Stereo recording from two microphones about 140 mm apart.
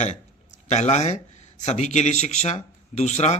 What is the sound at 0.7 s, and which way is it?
Speech, 55° left (ahead or behind).